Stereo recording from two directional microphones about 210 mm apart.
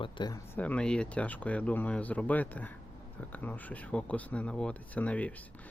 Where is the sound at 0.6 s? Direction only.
5° left (ahead or behind).